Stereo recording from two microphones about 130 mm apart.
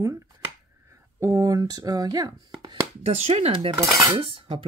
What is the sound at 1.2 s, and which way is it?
Speech, 25° right (ahead or behind).